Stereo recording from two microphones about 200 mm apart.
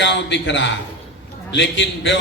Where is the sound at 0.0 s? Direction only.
60° left (ahead or behind).